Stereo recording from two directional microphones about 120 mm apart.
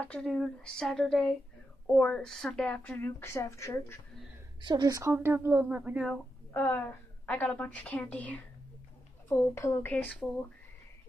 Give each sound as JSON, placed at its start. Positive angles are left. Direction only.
{"t": 0.0, "sound": "a woman's voice", "side_deg": 10}
{"t": 0.3, "sound": "a sound", "side_deg": 5}
{"t": 2.0, "sound": "a woman's voice", "side_deg": 5}
{"t": 4.6, "sound": "speech", "side_deg": -40}
{"t": 6.5, "sound": "a woman's voice", "side_deg": 15}